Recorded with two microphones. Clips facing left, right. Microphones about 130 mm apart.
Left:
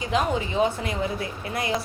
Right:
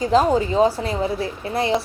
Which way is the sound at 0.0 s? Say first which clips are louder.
Right 8 dB; 35° right (ahead or behind).